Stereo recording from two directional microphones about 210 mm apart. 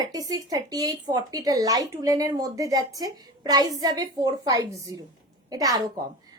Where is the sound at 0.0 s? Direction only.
15° right (ahead or behind).